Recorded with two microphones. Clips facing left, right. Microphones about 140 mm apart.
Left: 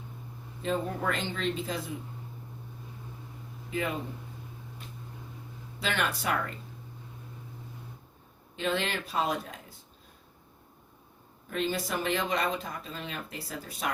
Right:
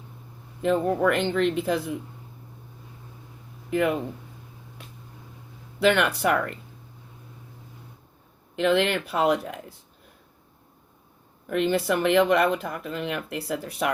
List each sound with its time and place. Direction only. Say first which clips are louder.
0.6 s speech: right 9 dB; 65° right (ahead or behind)
3.7 s speech: right 9 dB; 65° right (ahead or behind)
5.8 s speech: right 10 dB; 65° right (ahead or behind)
8.5 s speech: right 9 dB; 70° right (ahead or behind)
11.4 s speech: right 8 dB; 65° right (ahead or behind)